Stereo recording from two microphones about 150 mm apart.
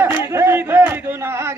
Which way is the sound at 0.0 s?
15° right (ahead or behind).